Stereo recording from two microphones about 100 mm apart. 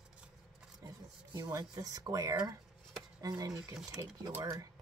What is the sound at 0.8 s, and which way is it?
Speech, 35° right (ahead or behind).